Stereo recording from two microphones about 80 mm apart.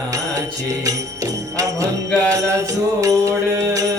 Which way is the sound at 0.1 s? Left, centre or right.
Right.